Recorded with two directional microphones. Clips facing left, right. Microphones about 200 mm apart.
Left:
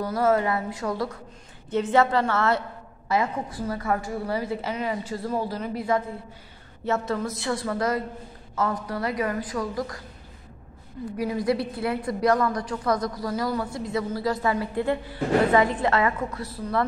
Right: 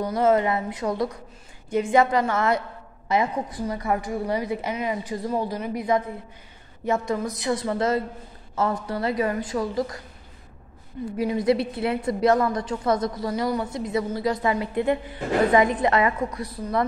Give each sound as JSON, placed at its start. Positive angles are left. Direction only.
{"t": 0.0, "sound": "a woman's voice", "side_deg": -20}
{"t": 11.1, "sound": "a woman's voice", "side_deg": -20}